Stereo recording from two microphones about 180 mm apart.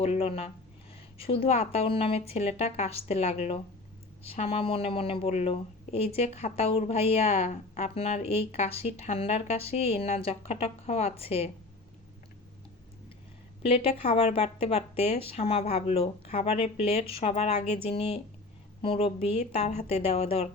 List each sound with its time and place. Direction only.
0.0 s a woman's voice: 35° left (ahead or behind)
13.6 s a woman's voice: 35° left (ahead or behind)